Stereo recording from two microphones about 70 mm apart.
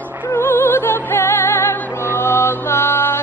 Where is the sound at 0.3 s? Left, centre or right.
Left.